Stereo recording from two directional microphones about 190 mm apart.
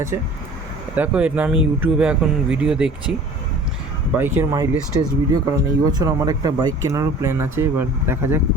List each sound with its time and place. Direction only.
0.9 s speech: 10° right (ahead or behind)
4.2 s speech: 15° right (ahead or behind)